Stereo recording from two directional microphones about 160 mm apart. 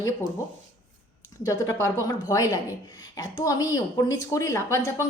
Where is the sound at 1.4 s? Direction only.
20° left (ahead or behind).